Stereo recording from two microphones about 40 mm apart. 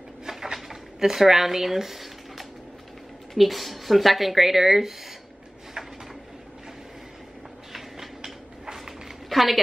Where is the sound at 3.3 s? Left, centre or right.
Centre.